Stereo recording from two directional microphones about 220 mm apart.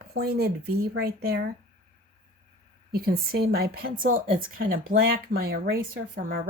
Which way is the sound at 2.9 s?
45° right (ahead or behind).